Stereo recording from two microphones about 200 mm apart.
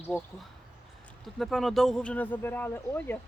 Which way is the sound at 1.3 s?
Centre (ahead or behind).